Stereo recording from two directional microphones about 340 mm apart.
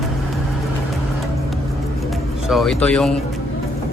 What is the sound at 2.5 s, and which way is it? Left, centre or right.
Speech, centre.